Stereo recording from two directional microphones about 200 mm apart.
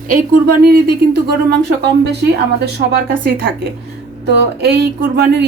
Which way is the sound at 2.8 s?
40° right (ahead or behind).